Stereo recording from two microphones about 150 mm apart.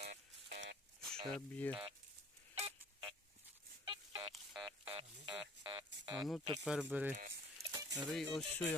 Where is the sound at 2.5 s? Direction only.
35° right (ahead or behind).